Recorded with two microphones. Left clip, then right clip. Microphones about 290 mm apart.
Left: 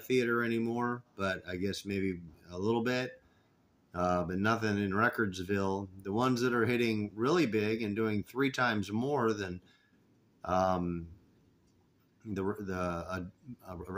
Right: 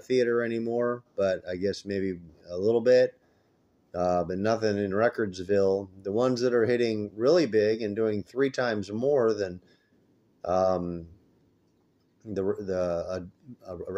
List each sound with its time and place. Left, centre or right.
0.0 s speech: left
12.2 s speech: left